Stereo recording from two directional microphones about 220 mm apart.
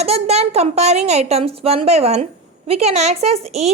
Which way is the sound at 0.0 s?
30° right (ahead or behind).